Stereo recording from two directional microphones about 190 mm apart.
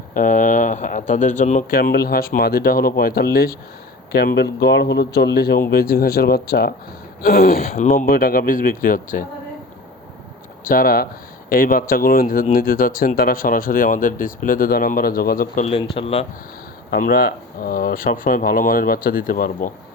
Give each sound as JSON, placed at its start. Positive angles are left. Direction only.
{"t": 0.1, "sound": "speech", "side_deg": 45}
{"t": 10.6, "sound": "speech", "side_deg": 50}
{"t": 15.8, "sound": "speech", "side_deg": 30}
{"t": 16.9, "sound": "speech", "side_deg": 50}